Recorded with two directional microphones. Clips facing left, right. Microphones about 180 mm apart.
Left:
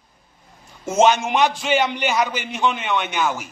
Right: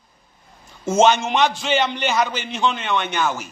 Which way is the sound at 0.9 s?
10° left (ahead or behind).